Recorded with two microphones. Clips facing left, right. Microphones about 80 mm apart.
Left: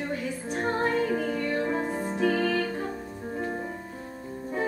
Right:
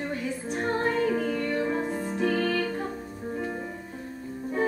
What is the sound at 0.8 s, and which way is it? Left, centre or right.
Music, centre.